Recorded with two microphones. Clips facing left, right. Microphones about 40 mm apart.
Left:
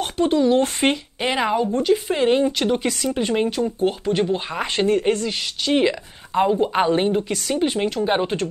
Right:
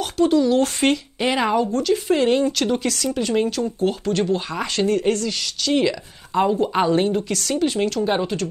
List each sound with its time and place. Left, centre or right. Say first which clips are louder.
0.0 s speech: right 1 dB; left
0.7 s speech: right 1 dB; centre
1.7 s speech: even; left